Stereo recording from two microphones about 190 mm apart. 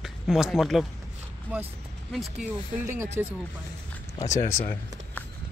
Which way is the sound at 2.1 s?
Centre (ahead or behind).